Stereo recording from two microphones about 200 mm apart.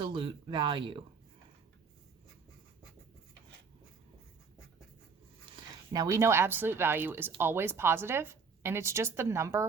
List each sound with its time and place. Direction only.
0.0 s speech: 25° right (ahead or behind)
5.9 s speech: 15° right (ahead or behind)